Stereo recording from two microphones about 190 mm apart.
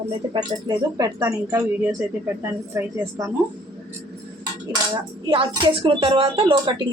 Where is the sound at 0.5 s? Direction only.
30° right (ahead or behind).